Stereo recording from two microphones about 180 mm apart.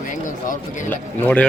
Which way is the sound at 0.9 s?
10° left (ahead or behind).